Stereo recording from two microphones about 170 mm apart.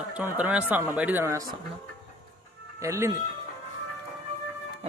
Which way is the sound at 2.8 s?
15° right (ahead or behind).